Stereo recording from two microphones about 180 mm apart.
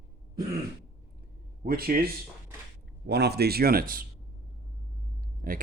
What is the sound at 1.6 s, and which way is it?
Speech, 55° right (ahead or behind).